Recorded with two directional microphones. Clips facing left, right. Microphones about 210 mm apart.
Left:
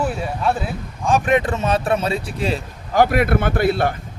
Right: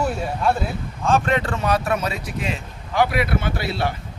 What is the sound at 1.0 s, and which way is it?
A man's voice, 15° left (ahead or behind).